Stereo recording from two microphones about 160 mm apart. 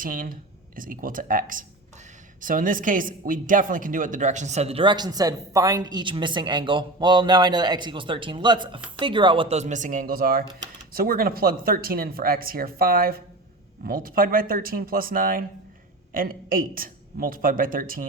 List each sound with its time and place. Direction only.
0.0 s speech: 60° right (ahead or behind)